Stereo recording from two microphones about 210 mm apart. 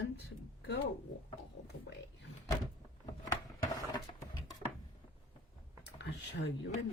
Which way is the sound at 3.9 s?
15° left (ahead or behind).